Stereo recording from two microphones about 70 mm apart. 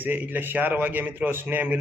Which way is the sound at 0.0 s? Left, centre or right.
Right.